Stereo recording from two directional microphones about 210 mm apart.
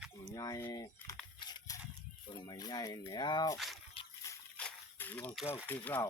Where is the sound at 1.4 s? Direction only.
20° left (ahead or behind).